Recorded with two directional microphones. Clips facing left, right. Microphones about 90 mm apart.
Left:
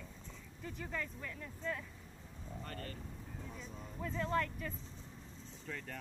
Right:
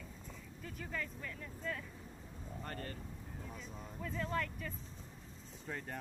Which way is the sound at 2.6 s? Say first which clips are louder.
Right 2 dB; 35° right (ahead or behind).